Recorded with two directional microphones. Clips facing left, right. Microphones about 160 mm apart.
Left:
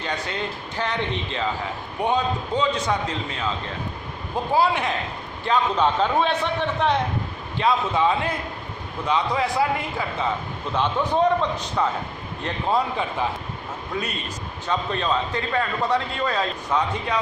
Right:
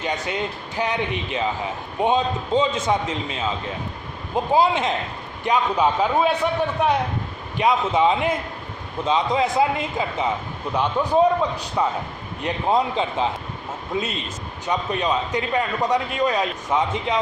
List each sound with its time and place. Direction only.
0.0 s a man's voice: 15° right (ahead or behind)
4.5 s a man's voice: 20° right (ahead or behind)
5.5 s a man's voice: 10° right (ahead or behind)